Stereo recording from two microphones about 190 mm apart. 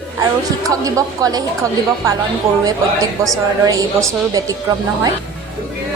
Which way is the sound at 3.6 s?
20° right (ahead or behind).